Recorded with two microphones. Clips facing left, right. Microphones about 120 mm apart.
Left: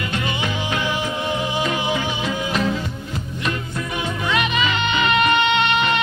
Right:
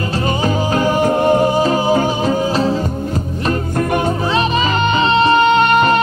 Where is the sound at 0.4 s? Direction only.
40° right (ahead or behind).